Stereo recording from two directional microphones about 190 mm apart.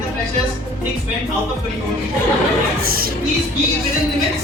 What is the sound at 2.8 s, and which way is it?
Music, 50° right (ahead or behind).